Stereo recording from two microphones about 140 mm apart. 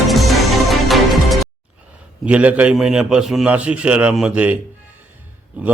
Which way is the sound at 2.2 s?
10° right (ahead or behind).